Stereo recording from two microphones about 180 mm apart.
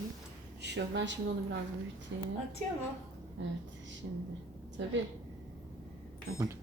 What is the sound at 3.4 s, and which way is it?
Speech, 90° right.